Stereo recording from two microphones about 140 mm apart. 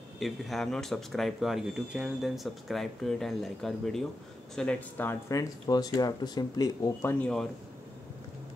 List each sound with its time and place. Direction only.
0.2 s speech: centre (ahead or behind); by 7.2 s 25° left (ahead or behind)
7.2 s speech: 5° left (ahead or behind)